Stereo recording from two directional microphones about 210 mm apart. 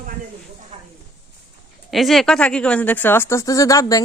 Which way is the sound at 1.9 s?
Centre (ahead or behind).